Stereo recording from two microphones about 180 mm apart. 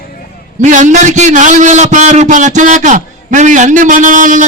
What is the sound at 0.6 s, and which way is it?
A man's voice, 45° right (ahead or behind).